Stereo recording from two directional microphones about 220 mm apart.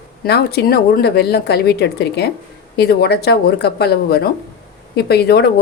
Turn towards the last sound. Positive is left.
turn(degrees=45)  # may be behind; listen again after turning